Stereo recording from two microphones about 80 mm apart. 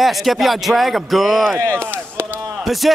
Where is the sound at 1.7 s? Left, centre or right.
Centre.